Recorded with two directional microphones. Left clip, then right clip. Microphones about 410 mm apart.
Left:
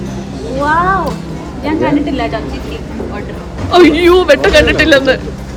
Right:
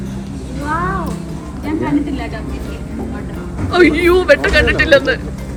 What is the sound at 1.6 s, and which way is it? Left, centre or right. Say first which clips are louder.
Speech: left 5 dB; centre.